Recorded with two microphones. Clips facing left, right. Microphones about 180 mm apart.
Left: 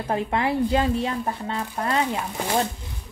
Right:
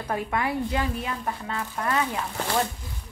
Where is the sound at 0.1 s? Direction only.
25° left (ahead or behind).